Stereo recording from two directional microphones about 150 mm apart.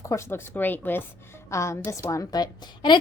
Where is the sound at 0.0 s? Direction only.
20° left (ahead or behind).